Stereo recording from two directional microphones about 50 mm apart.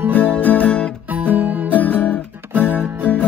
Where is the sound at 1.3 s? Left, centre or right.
Right.